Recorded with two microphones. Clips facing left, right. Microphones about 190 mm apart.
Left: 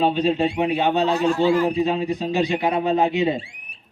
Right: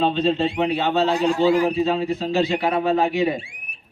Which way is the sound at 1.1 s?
15° right (ahead or behind).